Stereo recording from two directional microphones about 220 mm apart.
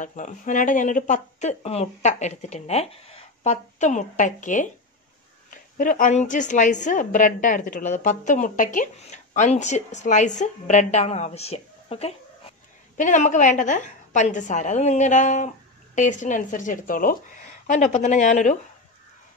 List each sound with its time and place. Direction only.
0.0 s a woman's voice: 35° left (ahead or behind)